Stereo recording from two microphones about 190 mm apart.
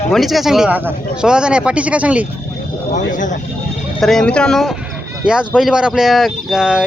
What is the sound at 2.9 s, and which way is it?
Speech, 40° left (ahead or behind).